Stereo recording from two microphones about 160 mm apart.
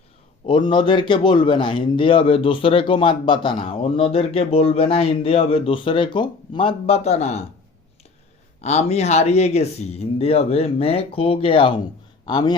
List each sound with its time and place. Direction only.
0.4 s a man's voice: 30° left (ahead or behind)
8.6 s a man's voice: 45° left (ahead or behind); by 12.5 s 25° left (ahead or behind)